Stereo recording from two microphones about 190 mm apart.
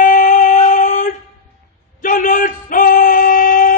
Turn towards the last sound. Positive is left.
turn(degrees=45)  # may be behind; listen again after turning